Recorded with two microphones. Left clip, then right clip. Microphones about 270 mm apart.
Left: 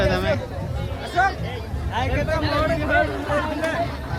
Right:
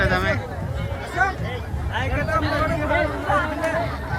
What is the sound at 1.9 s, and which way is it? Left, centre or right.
Speech, left.